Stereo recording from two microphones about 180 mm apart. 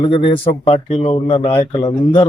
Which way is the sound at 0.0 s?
30° left (ahead or behind).